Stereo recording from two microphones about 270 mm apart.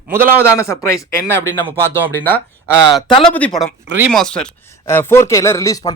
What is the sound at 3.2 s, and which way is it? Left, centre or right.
Speech, centre.